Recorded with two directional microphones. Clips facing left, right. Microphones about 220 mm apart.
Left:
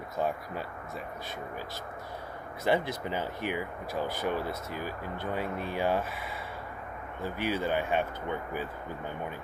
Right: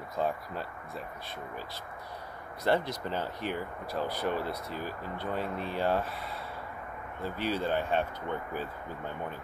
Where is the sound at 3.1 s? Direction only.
10° left (ahead or behind).